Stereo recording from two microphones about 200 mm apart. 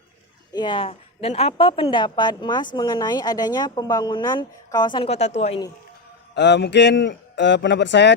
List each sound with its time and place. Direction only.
0.5 s a woman's voice: 25° left (ahead or behind)
6.3 s a man's voice: 60° left (ahead or behind)